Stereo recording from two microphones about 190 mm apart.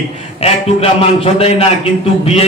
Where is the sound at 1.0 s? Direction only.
30° left (ahead or behind).